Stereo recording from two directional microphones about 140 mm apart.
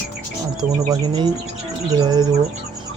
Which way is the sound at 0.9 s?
30° right (ahead or behind).